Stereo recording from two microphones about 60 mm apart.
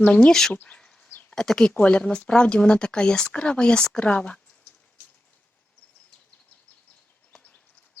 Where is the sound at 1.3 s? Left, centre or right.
Centre.